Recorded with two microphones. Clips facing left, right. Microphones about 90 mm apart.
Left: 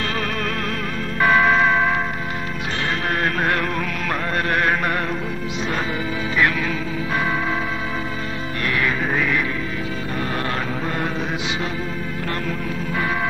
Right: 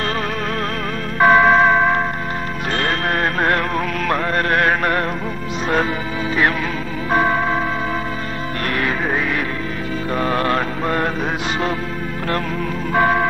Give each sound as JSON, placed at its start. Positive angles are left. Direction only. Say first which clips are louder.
{"t": 1.2, "sound": "emergency vehicle", "louder": "right 4 dB", "side_deg": -40}
{"t": 2.7, "sound": "music", "louder": "right 4 dB", "side_deg": -40}
{"t": 4.8, "sound": "music", "louder": "right 4 dB", "side_deg": 0}
{"t": 7.1, "sound": "music", "louder": "right 7 dB", "side_deg": -40}
{"t": 8.6, "sound": "music", "louder": "right 1 dB", "side_deg": -40}
{"t": 10.2, "sound": "mantra", "louder": "right 7 dB", "side_deg": -50}
{"t": 12.9, "sound": "music", "louder": "right 8 dB", "side_deg": -55}